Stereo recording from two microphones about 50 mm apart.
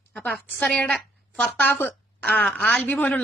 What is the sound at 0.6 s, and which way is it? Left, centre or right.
A woman's voice, left.